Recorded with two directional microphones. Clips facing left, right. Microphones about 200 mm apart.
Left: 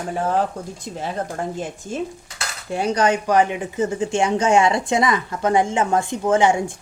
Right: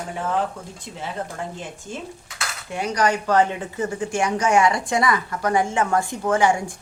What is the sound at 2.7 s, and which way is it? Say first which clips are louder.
Speech: left 3 dB; 30° left (ahead or behind).